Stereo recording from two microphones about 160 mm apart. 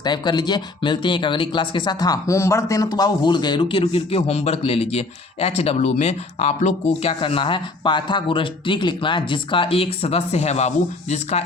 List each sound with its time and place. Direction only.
0.0 s speech: 25° left (ahead or behind); by 7.1 s 45° left (ahead or behind)
7.1 s speech: 35° left (ahead or behind)